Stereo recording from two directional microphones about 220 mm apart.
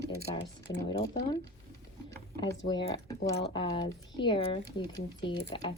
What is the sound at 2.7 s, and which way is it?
Speech, 20° left (ahead or behind).